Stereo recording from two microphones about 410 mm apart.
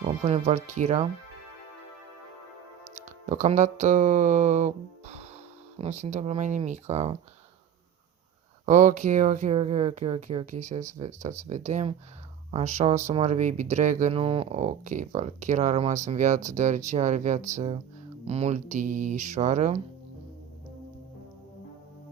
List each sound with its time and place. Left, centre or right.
0.3 s speech: centre
3.2 s speech: centre
8.6 s speech: centre